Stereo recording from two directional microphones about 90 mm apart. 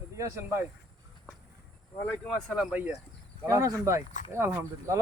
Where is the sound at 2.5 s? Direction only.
5° right (ahead or behind).